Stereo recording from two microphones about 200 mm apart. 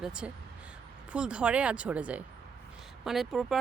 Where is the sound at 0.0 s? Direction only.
5° right (ahead or behind).